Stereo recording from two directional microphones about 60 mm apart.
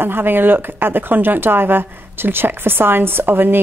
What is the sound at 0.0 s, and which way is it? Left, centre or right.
Speech, right.